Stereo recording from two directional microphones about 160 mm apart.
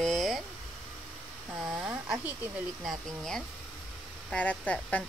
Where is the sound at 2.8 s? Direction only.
Centre (ahead or behind).